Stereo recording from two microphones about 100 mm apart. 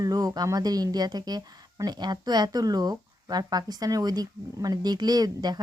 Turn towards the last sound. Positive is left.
turn(degrees=-40)  # may be behind; listen again after turning